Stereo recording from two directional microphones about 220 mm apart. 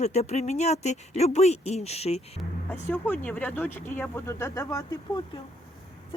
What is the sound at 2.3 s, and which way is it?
Speech, 10° left (ahead or behind).